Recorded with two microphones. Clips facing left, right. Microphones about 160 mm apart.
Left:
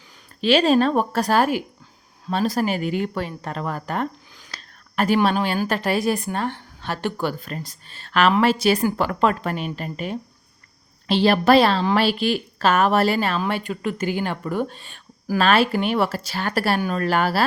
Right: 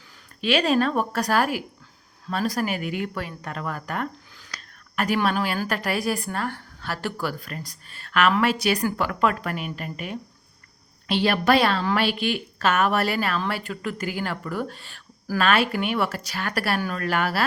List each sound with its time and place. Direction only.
0.4 s a woman's voice: 30° left (ahead or behind)
15.4 s a woman's voice: 30° left (ahead or behind)